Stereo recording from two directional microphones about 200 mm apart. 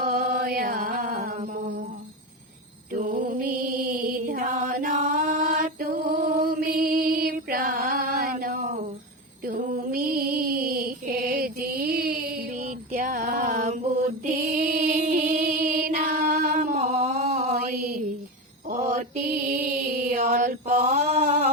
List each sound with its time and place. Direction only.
0.0 s music: 45° right (ahead or behind)
2.9 s mantra: 45° right (ahead or behind)
14.3 s music: 40° right (ahead or behind)
18.7 s mantra: 40° right (ahead or behind)